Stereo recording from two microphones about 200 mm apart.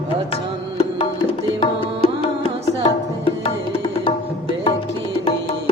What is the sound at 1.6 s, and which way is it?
Tabla, 25° left (ahead or behind).